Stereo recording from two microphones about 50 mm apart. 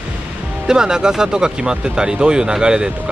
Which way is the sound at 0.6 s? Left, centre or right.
Centre.